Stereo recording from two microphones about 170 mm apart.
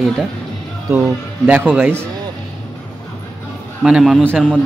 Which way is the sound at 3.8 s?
5° right (ahead or behind).